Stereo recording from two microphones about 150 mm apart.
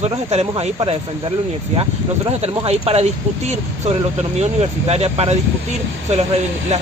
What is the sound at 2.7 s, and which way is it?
Speech, 45° right (ahead or behind).